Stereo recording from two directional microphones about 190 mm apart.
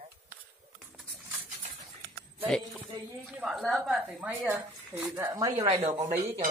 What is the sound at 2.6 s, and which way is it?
Speech, 15° right (ahead or behind).